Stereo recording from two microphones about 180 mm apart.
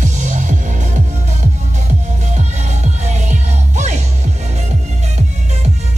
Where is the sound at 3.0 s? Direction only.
40° right (ahead or behind).